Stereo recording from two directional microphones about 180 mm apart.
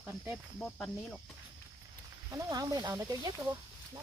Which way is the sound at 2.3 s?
20° right (ahead or behind).